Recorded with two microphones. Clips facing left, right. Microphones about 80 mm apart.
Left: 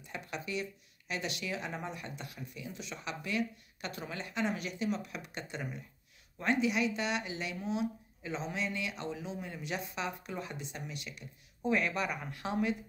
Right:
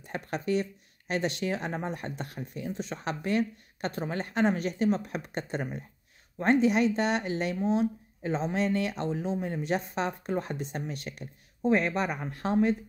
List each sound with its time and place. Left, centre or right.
0.0 s speech: right